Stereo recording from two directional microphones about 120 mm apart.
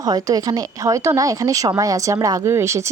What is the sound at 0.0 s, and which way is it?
Speech, 35° right (ahead or behind).